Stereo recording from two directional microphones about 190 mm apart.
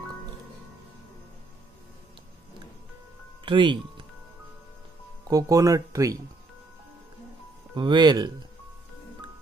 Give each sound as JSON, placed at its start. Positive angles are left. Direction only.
{"t": 3.4, "sound": "speech", "side_deg": -25}
{"t": 5.3, "sound": "speech", "side_deg": -20}
{"t": 7.7, "sound": "speech", "side_deg": -25}